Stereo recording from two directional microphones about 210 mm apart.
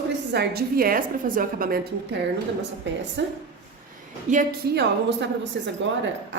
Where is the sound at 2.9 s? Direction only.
60° right (ahead or behind).